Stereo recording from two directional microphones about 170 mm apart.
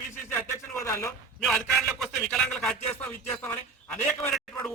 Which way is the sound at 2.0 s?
5° left (ahead or behind).